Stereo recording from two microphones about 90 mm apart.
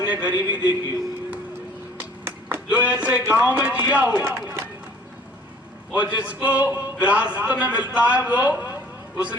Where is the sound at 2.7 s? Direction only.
15° right (ahead or behind).